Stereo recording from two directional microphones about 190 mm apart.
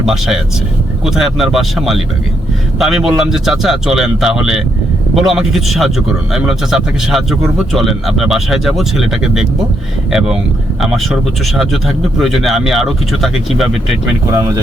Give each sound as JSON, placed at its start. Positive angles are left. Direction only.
{"t": 0.0, "sound": "speech", "side_deg": 0}
{"t": 14.3, "sound": "speech", "side_deg": -15}